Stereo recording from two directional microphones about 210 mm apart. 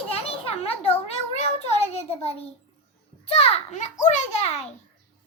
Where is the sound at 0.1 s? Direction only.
30° left (ahead or behind).